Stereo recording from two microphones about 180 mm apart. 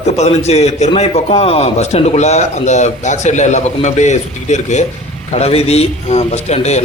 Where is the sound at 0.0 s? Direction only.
35° left (ahead or behind).